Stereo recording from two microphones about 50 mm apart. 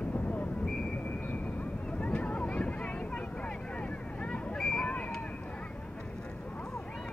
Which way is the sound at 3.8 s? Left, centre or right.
Left.